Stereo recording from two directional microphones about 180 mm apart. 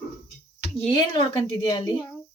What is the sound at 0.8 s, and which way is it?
A woman's voice, 25° left (ahead or behind).